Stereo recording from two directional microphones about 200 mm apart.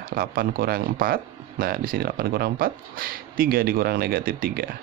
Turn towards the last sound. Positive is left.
turn(degrees=-45)  # may be behind; listen again after turning